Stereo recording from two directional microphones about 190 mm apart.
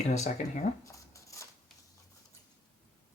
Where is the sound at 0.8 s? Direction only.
15° left (ahead or behind).